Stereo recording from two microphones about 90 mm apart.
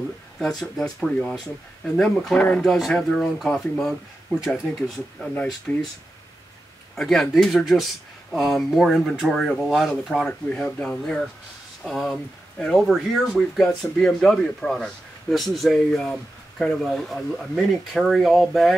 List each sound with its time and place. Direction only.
0.4 s speech: 5° left (ahead or behind)
2.0 s speech: 5° left (ahead or behind)
5.3 s speech: 15° left (ahead or behind)
7.0 s speech: 5° left (ahead or behind)